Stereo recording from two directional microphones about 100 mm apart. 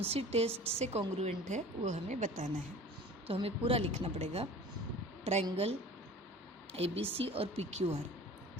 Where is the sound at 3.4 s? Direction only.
80° right.